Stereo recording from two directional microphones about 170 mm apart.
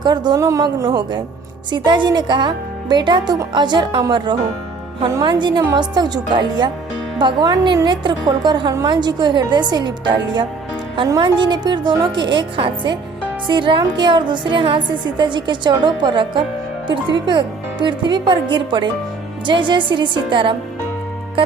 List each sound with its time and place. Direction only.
0.0 s a woman's voice: 25° right (ahead or behind)